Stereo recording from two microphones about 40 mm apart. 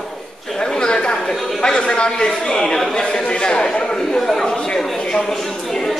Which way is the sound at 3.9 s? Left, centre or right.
Centre.